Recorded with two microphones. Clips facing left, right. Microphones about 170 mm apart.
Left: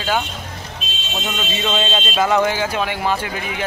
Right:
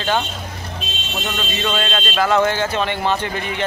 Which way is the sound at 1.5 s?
15° left (ahead or behind).